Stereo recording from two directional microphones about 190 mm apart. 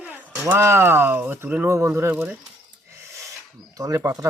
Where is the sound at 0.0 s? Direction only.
10° right (ahead or behind).